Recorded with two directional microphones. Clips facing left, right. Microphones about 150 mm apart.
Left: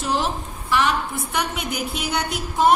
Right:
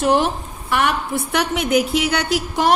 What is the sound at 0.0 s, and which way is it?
A woman's voice, 60° right (ahead or behind).